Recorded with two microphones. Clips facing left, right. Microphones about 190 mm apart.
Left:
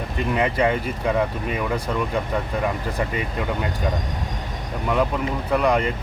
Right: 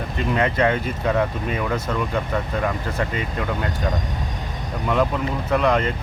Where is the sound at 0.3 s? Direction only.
10° left (ahead or behind).